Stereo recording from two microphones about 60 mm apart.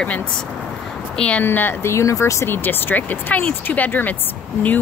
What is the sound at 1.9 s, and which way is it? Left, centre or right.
Speech, left.